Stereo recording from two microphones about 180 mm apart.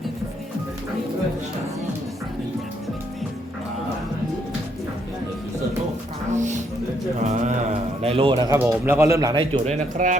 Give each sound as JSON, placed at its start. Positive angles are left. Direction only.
{"t": 6.3, "sound": "music", "side_deg": -40}
{"t": 7.3, "sound": "a sound", "side_deg": -40}
{"t": 8.0, "sound": "speech", "side_deg": -30}
{"t": 8.5, "sound": "speech", "side_deg": -10}
{"t": 9.6, "sound": "speech", "side_deg": -45}